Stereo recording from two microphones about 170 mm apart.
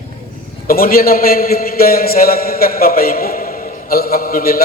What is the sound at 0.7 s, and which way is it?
A man's voice, 60° left (ahead or behind).